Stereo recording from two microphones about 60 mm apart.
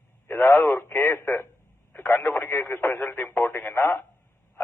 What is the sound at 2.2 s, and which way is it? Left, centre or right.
Speech, left.